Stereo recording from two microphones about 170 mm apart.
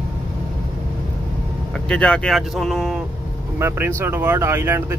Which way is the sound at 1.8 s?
5° left (ahead or behind).